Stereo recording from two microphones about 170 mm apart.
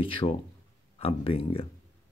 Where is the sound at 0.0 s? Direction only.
30° left (ahead or behind).